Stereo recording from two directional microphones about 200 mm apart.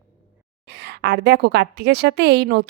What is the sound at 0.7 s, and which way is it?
A woman's voice, 55° right (ahead or behind).